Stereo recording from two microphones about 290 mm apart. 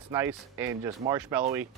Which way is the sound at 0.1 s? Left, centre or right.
Centre.